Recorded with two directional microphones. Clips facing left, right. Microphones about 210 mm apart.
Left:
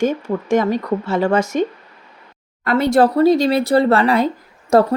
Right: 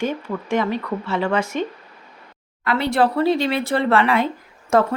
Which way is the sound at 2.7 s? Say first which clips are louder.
Left 5 dB; 45° left (ahead or behind).